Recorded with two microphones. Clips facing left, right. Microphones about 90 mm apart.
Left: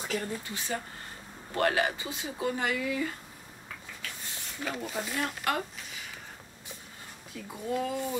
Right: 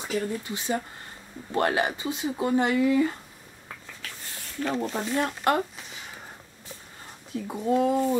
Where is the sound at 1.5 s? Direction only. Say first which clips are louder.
Right 3 dB; 25° right (ahead or behind).